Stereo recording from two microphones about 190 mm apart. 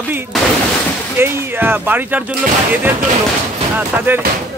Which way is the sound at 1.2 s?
10° right (ahead or behind).